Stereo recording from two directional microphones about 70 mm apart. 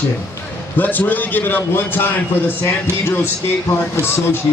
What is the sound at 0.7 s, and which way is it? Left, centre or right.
Speech, left.